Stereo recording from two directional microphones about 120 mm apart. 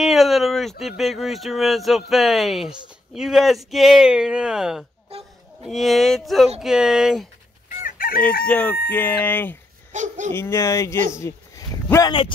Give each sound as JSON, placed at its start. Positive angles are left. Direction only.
{"t": 0.0, "sound": "speech", "side_deg": 0}
{"t": 5.1, "sound": "a sound", "side_deg": -55}
{"t": 5.7, "sound": "speech", "side_deg": 0}
{"t": 8.2, "sound": "speech", "side_deg": 15}
{"t": 9.9, "sound": "speech", "side_deg": -90}
{"t": 10.3, "sound": "speech", "side_deg": 25}
{"t": 11.1, "sound": "a sound", "side_deg": 25}